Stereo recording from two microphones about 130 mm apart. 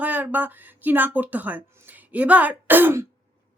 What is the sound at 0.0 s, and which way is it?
Speech, 10° right (ahead or behind).